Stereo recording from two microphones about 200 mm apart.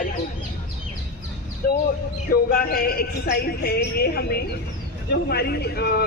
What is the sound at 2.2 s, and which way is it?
Speech, 50° left (ahead or behind).